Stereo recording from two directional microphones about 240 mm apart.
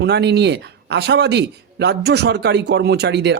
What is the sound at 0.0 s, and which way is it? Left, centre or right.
Speech, right.